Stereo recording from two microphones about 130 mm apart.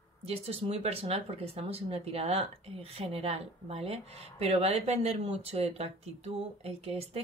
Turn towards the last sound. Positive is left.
turn(degrees=-50)  # may be behind; listen again after turning